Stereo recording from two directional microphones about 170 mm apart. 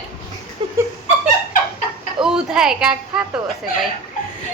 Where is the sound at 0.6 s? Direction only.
25° right (ahead or behind).